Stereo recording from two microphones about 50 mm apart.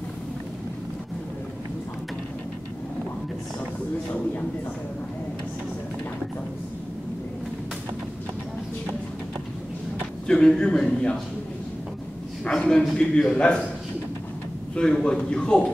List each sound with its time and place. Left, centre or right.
10.2 s a man's voice: centre
12.4 s a man's voice: centre
14.8 s a man's voice: left